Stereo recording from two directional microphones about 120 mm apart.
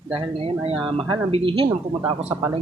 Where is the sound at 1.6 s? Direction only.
40° right (ahead or behind).